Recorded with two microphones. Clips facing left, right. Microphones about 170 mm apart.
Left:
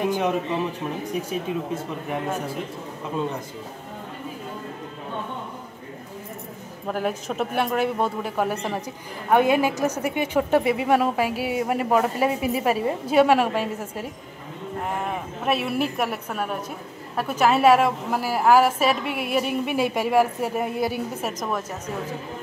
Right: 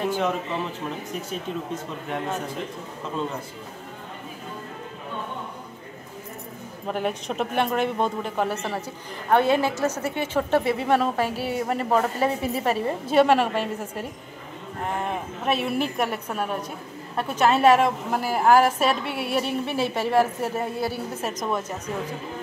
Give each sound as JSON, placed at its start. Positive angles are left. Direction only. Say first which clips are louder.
{"t": 0.0, "sound": "a sound", "louder": "left 1 dB", "side_deg": 15}
{"t": 1.5, "sound": "a woman's voice", "louder": "left 3 dB", "side_deg": 10}
{"t": 6.9, "sound": "a woman's voice", "louder": "left 1 dB", "side_deg": 5}
{"t": 15.4, "sound": "a woman's voice", "louder": "left 1 dB", "side_deg": 5}